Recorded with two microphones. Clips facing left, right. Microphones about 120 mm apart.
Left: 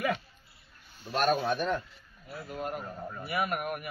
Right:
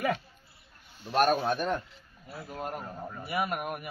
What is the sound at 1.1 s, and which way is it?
Speech, 45° right (ahead or behind).